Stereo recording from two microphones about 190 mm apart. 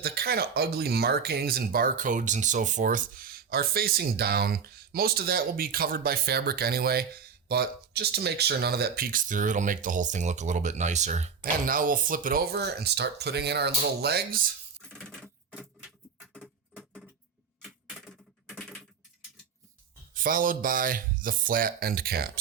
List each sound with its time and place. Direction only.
0.0 s speech: 55° right (ahead or behind)
14.8 s a sound: 5° left (ahead or behind)
17.6 s typewriter: centre (ahead or behind)
20.1 s speech: 45° right (ahead or behind)